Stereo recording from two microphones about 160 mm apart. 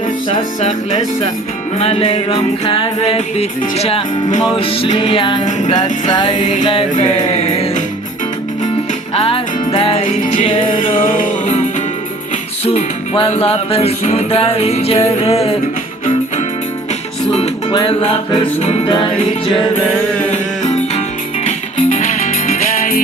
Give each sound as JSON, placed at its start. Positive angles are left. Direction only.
{"t": 0.3, "sound": "music", "side_deg": 45}
{"t": 5.4, "sound": "music", "side_deg": 50}
{"t": 9.1, "sound": "music", "side_deg": 35}
{"t": 10.1, "sound": "music", "side_deg": 45}
{"t": 10.9, "sound": "music", "side_deg": 60}
{"t": 12.6, "sound": "music", "side_deg": 40}
{"t": 17.7, "sound": "music", "side_deg": 30}
{"t": 20.3, "sound": "music", "side_deg": 45}